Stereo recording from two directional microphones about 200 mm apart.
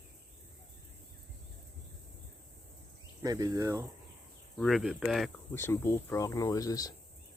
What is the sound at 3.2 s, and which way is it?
Speech, 20° right (ahead or behind).